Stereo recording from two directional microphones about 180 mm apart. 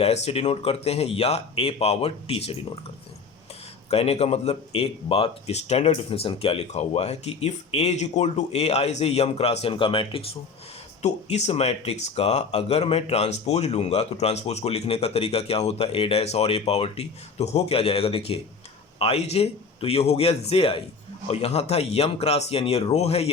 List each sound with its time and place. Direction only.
0.0 s speech: 35° left (ahead or behind)
3.8 s speech: 35° left (ahead or behind)